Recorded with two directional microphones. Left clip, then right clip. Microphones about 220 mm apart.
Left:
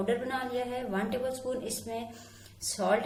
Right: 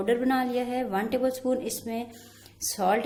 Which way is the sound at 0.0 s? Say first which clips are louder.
Right 6 dB; 40° right (ahead or behind).